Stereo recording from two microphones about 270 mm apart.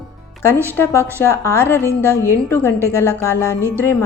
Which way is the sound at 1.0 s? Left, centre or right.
Centre.